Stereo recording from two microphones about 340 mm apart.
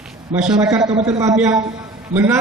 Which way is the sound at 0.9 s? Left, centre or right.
Centre.